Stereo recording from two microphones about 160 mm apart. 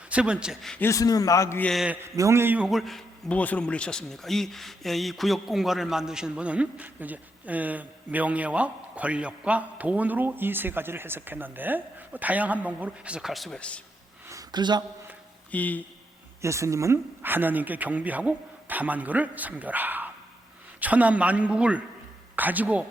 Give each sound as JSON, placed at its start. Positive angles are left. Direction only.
{"t": 0.1, "sound": "a man's voice", "side_deg": -5}
{"t": 0.8, "sound": "speech", "side_deg": 20}
{"t": 1.7, "sound": "a man's voice", "side_deg": -5}
{"t": 2.1, "sound": "speech", "side_deg": -20}
{"t": 2.6, "sound": "speech", "side_deg": 0}
{"t": 14.3, "sound": "a sound", "side_deg": -25}
{"t": 15.5, "sound": "speech", "side_deg": 10}
{"t": 16.4, "sound": "speech", "side_deg": -20}